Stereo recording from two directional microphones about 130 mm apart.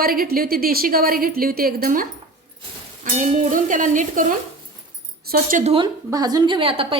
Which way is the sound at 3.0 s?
75° right (ahead or behind).